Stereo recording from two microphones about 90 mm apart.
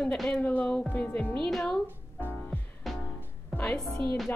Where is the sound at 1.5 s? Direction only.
5° left (ahead or behind).